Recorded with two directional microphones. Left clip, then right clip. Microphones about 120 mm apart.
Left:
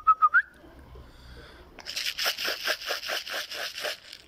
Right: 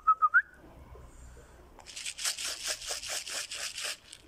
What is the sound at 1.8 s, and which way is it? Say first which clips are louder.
Squeak: left 8 dB; 80° left.